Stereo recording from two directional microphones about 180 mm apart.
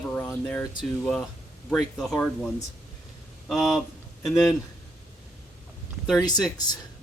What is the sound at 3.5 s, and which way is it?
Speech, centre (ahead or behind).